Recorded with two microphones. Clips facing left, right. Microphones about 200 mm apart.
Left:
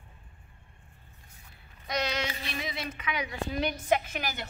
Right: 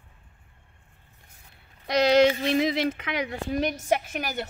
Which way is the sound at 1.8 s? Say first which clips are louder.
Right 13 dB; 80° right.